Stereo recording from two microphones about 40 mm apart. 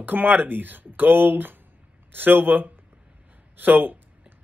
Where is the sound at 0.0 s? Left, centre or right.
Right.